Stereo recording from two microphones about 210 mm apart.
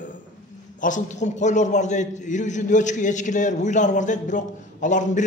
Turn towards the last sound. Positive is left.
turn(degrees=35)  # may be behind; listen again after turning